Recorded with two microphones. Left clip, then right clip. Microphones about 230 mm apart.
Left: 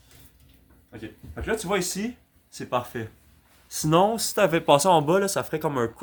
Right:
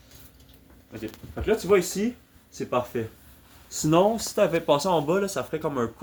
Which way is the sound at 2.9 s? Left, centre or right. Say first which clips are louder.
Right 4 dB; left.